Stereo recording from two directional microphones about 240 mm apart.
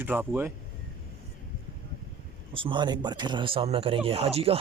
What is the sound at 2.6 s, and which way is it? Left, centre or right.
Speech, centre.